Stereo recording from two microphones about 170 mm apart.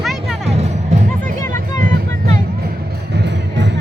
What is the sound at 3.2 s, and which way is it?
Music, 90° right.